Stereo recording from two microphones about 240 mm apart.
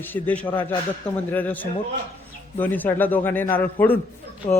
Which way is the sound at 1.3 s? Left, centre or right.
Centre.